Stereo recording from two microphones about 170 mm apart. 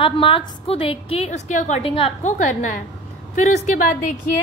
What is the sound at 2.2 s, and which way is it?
A woman's voice, 45° left (ahead or behind).